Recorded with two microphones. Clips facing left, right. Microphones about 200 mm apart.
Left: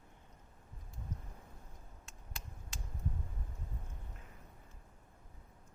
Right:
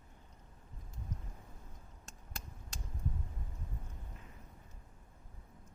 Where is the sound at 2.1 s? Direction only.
45° right (ahead or behind).